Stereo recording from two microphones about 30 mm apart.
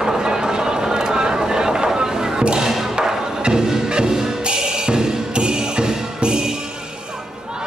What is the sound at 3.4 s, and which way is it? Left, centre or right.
Music, right.